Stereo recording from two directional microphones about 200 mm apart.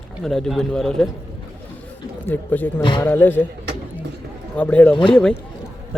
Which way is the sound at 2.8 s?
25° left (ahead or behind).